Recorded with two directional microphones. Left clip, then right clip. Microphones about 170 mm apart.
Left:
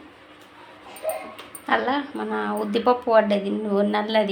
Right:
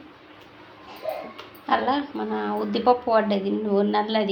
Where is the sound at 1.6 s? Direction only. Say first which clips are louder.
Even; 5° left (ahead or behind).